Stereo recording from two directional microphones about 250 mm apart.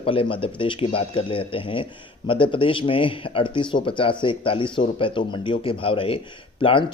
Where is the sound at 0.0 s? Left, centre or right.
Left.